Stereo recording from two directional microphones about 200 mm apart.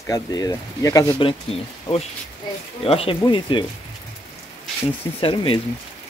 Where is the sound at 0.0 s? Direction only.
20° left (ahead or behind).